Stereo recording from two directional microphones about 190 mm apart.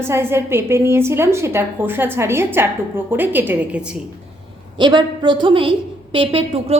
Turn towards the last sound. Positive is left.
turn(degrees=-30)  # may be behind; listen again after turning